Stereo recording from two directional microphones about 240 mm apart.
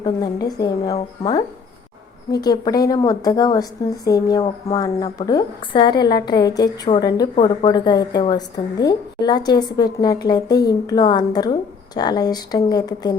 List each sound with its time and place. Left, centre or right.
0.0 s speech: centre
2.3 s speech: centre